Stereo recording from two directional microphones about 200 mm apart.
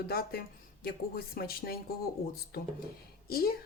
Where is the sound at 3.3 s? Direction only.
50° left (ahead or behind).